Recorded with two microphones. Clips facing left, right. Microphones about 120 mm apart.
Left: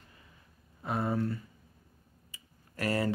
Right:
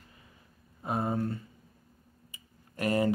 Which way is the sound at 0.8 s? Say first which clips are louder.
Right 1 dB; 25° right (ahead or behind).